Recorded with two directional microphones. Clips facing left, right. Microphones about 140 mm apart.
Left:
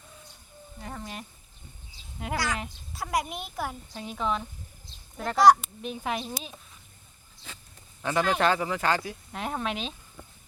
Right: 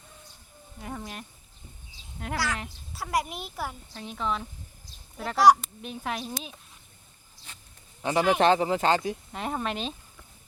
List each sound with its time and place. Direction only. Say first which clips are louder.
0.8 s speech: right 1 dB; 5° right (ahead or behind)
8.0 s speech: right 2 dB; 15° right (ahead or behind)
8.4 s speech: right 4 dB; 25° right (ahead or behind)
9.3 s speech: left 3 dB; centre (ahead or behind)